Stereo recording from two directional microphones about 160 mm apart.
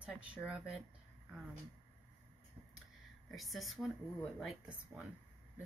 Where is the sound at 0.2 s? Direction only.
5° right (ahead or behind).